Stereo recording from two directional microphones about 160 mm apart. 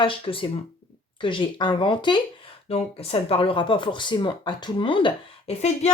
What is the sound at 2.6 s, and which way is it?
Speech, 40° left (ahead or behind).